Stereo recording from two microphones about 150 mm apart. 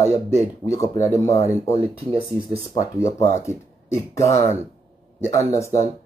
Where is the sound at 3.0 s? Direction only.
20° left (ahead or behind).